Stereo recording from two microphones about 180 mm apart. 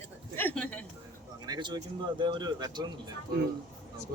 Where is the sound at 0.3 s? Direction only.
10° left (ahead or behind).